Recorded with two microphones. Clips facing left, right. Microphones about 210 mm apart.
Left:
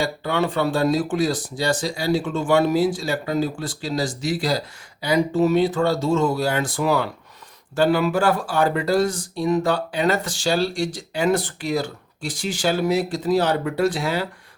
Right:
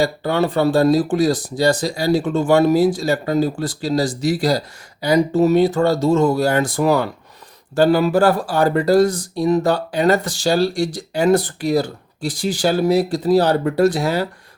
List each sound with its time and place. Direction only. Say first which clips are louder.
0.0 s speech: right 5 dB; 40° right (ahead or behind)